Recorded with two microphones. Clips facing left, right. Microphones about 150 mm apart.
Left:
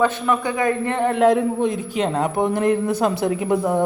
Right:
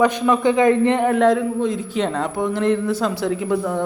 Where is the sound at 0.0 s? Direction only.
15° right (ahead or behind).